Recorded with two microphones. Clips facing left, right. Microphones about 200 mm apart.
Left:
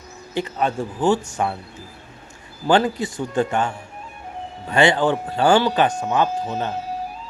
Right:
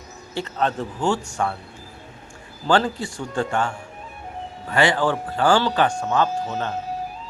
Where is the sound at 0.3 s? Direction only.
10° left (ahead or behind).